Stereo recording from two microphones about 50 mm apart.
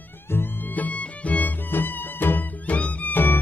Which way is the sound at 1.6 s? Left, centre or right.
Left.